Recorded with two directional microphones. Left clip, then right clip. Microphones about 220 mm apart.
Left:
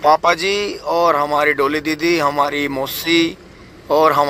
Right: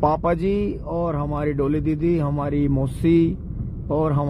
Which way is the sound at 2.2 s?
20° left (ahead or behind).